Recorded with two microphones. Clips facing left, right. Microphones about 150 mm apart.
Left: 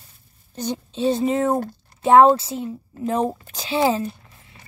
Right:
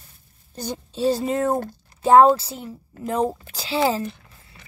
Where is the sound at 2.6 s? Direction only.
30° left (ahead or behind).